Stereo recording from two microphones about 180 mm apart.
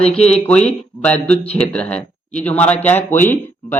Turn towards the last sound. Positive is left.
turn(degrees=10)  # may be behind; listen again after turning